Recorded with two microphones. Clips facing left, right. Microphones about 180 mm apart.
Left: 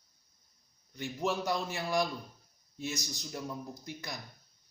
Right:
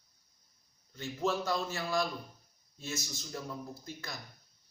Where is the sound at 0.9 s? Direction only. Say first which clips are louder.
Even; 15° left (ahead or behind).